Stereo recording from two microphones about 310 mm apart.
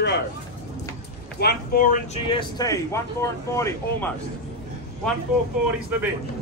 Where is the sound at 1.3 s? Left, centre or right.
Left; by 4.1 s centre.